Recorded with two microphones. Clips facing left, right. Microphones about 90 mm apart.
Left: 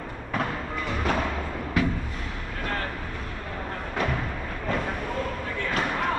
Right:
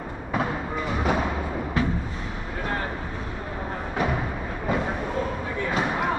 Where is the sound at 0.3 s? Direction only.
10° right (ahead or behind).